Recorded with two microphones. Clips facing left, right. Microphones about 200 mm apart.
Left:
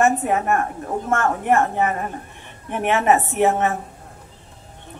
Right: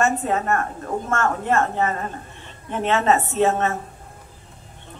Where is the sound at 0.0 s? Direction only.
15° left (ahead or behind).